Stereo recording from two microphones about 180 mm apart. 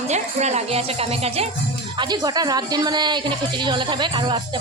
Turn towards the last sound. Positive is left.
turn(degrees=-25)  # may be behind; listen again after turning